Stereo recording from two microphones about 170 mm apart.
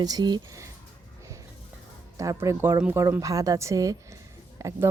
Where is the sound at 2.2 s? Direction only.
20° right (ahead or behind).